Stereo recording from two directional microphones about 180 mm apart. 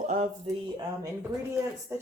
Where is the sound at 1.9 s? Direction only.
15° right (ahead or behind).